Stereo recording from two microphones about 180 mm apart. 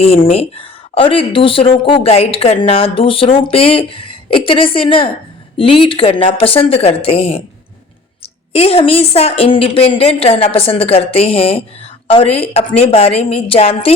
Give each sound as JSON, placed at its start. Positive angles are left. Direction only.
{"t": 0.0, "sound": "a woman's voice", "side_deg": 35}